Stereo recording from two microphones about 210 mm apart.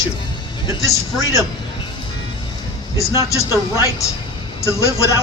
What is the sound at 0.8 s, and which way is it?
Speech, 15° left (ahead or behind).